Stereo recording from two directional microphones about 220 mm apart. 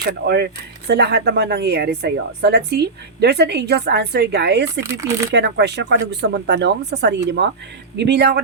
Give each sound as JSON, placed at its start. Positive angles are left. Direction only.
{"t": 0.0, "sound": "speech", "side_deg": -45}
{"t": 4.8, "sound": "speech", "side_deg": -10}
{"t": 5.3, "sound": "speech", "side_deg": -50}